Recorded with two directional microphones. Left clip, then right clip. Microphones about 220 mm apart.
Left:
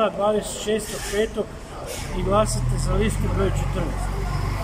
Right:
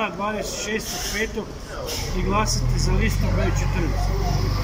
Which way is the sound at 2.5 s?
35° left (ahead or behind).